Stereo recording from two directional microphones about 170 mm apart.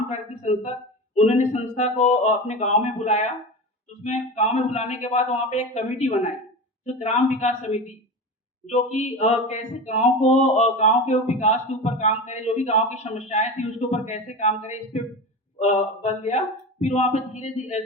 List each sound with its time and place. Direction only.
0.1 s speech: 40° left (ahead or behind)